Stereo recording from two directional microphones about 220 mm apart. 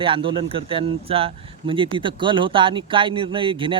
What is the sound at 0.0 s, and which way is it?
Speech, 25° right (ahead or behind).